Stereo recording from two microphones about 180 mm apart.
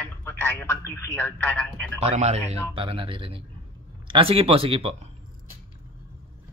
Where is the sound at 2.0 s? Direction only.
35° right (ahead or behind).